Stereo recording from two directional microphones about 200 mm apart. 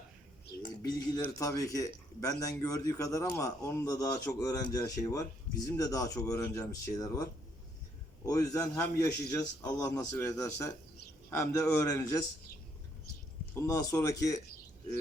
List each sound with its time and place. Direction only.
0.8 s speech: 20° left (ahead or behind)
13.6 s speech: 15° left (ahead or behind)